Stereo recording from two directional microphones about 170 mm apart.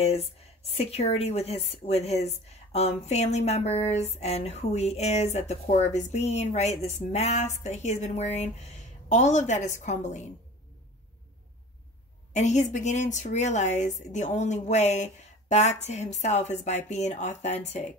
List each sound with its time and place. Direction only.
0.0 s speech: 35° left (ahead or behind)
12.3 s speech: 45° left (ahead or behind)